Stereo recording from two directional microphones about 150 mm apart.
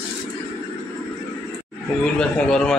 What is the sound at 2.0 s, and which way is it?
Speech, 5° left (ahead or behind).